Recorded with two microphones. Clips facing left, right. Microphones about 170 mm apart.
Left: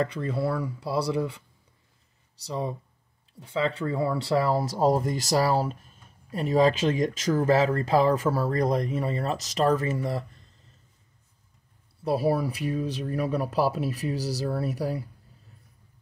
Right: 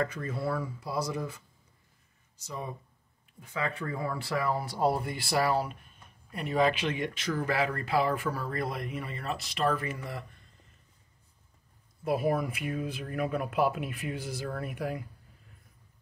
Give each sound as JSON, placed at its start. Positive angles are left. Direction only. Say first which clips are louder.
{"t": 0.0, "sound": "speech", "louder": "left 5 dB", "side_deg": 25}
{"t": 2.4, "sound": "speech", "louder": "left 8 dB", "side_deg": 30}
{"t": 12.0, "sound": "speech", "louder": "left 4 dB", "side_deg": 35}